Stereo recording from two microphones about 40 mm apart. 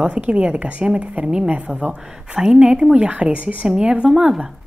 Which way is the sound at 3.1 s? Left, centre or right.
Right.